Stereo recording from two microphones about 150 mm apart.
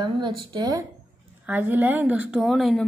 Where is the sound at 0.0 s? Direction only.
30° right (ahead or behind).